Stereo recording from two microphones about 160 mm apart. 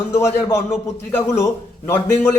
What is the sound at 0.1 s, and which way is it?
A man's voice, 15° left (ahead or behind).